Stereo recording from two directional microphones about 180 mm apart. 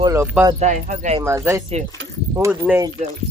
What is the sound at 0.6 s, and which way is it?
Speech, 40° right (ahead or behind).